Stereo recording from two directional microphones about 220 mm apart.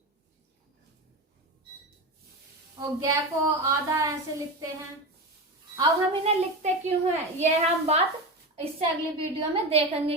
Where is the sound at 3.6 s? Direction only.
15° right (ahead or behind).